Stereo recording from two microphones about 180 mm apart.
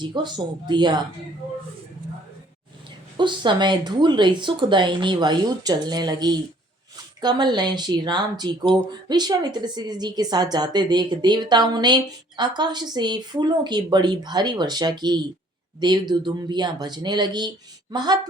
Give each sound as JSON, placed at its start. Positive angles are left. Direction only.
{"t": 0.0, "sound": "speech", "side_deg": -25}
{"t": 3.2, "sound": "speech", "side_deg": -25}